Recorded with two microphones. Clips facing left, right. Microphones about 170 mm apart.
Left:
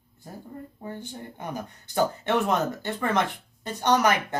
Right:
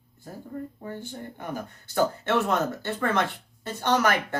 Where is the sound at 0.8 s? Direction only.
15° left (ahead or behind).